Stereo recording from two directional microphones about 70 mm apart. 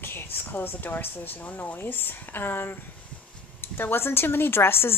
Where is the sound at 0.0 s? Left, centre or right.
Left.